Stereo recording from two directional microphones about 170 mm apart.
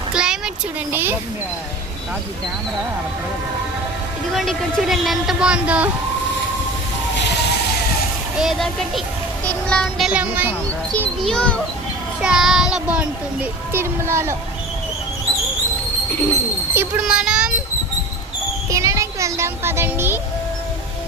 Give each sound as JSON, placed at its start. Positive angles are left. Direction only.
{"t": 0.1, "sound": "a sound", "side_deg": -5}
{"t": 4.4, "sound": "speech", "side_deg": 0}
{"t": 8.4, "sound": "speech", "side_deg": 0}
{"t": 10.1, "sound": "a child's voice", "side_deg": -10}
{"t": 11.2, "sound": "a child's voice", "side_deg": 5}
{"t": 16.7, "sound": "speech", "side_deg": -5}
{"t": 18.7, "sound": "speech", "side_deg": -20}